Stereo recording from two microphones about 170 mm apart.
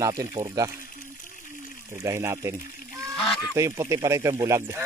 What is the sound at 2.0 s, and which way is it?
Speech, 15° right (ahead or behind).